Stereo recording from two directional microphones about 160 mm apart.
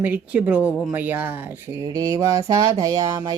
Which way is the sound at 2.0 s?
20° right (ahead or behind).